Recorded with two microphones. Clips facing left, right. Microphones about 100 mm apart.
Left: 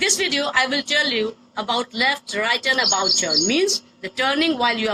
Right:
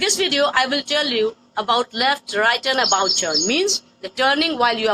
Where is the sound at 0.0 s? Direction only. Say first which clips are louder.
Right 4 dB; 60° right (ahead or behind).